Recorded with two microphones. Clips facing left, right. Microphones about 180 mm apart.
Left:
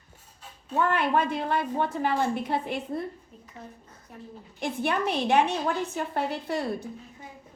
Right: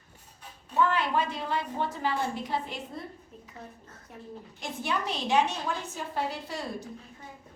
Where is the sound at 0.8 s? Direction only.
55° left (ahead or behind).